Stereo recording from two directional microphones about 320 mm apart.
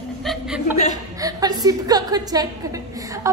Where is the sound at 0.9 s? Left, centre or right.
Centre.